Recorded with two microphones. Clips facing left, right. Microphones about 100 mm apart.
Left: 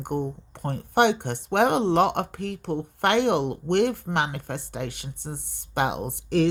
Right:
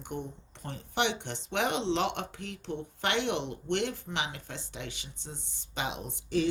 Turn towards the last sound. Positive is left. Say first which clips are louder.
# left 7 dB
turn(degrees=60)  # may be behind; listen again after turning